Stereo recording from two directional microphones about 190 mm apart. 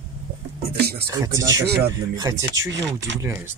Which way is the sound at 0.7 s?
55° right (ahead or behind).